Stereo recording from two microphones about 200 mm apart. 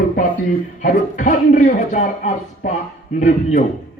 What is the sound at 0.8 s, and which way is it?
Speech, 40° left (ahead or behind).